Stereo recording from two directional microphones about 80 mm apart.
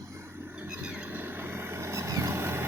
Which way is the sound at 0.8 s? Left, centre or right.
Centre.